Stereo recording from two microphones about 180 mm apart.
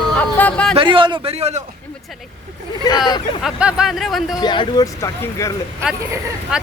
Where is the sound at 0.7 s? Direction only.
30° right (ahead or behind).